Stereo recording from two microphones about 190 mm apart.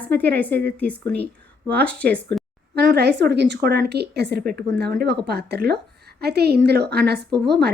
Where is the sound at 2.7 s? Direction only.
60° right (ahead or behind).